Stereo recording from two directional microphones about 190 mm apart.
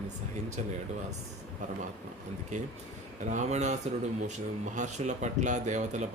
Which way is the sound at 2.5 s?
40° right (ahead or behind).